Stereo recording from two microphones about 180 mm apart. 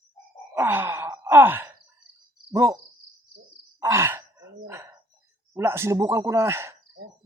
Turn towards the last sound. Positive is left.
turn(degrees=-15)  # may be behind; listen again after turning